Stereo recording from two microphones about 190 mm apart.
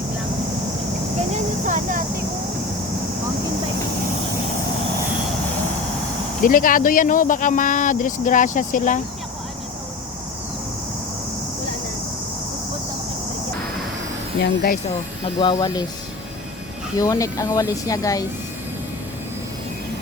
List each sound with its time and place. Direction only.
1.3 s a sound: 40° right (ahead or behind)
6.4 s speech: 45° left (ahead or behind)
14.3 s speech: 70° left (ahead or behind)
15.4 s speech: 20° left (ahead or behind)
17.0 s speech: 15° left (ahead or behind)